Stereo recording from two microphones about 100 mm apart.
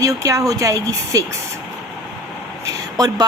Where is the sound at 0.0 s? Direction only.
35° right (ahead or behind).